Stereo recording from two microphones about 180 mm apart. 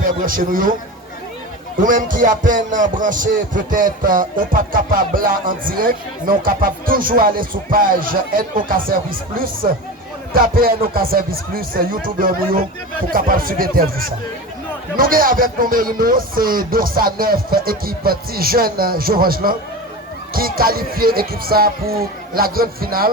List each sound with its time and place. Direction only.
0.0 s speech: 50° right (ahead or behind)
1.8 s speech: 50° right (ahead or behind)